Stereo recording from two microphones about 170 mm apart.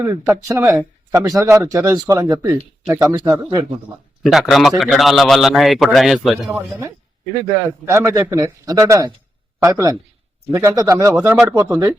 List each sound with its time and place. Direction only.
0.0 s speech: 15° right (ahead or behind)
4.2 s a man's voice: centre (ahead or behind)
6.5 s a man's voice: 15° right (ahead or behind)